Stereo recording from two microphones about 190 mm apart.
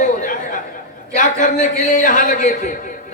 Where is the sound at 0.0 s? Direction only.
45° left (ahead or behind).